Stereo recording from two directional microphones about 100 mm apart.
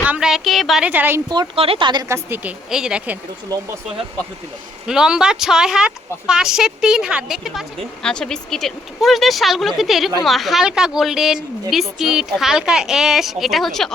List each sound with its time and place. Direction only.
0.2 s speech: 5° right (ahead or behind)
0.9 s a woman's voice: 20° right (ahead or behind)
1.5 s a woman's voice: 70° right (ahead or behind)
2.0 s a woman's voice: 30° right (ahead or behind)
2.4 s speech: 10° right (ahead or behind)
4.9 s speech: 5° right (ahead or behind)
8.0 s speech: 10° left (ahead or behind)